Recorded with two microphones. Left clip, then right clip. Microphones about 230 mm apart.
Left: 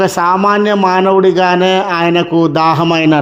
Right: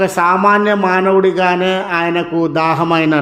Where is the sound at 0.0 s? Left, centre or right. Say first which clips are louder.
Left 1 dB; left.